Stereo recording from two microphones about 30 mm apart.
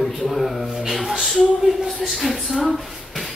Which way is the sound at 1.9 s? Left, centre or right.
Centre.